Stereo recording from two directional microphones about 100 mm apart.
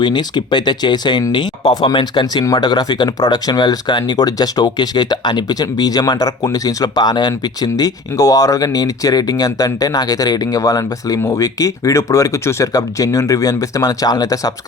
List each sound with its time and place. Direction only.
0.0 s speech: 45° left (ahead or behind)